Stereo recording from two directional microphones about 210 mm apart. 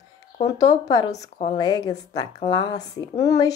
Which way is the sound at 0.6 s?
15° left (ahead or behind).